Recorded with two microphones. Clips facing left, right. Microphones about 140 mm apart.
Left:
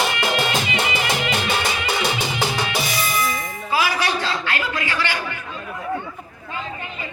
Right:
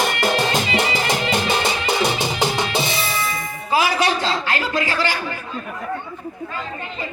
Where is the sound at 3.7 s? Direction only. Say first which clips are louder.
Right 3 dB; 25° right (ahead or behind).